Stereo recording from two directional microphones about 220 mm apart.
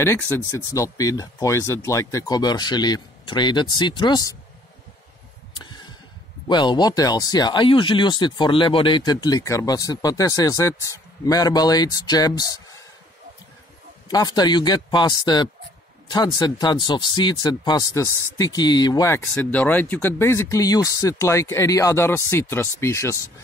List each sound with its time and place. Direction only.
0.7 s speech: 15° left (ahead or behind)
6.4 s speech: 20° left (ahead or behind)
14.0 s a man's voice: 20° left (ahead or behind)